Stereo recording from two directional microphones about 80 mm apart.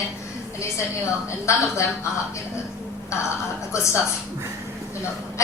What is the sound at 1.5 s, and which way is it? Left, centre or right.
Speech, left.